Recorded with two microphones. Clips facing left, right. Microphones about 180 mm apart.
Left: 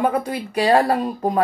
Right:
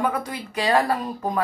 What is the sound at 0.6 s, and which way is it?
Speech, 35° left (ahead or behind).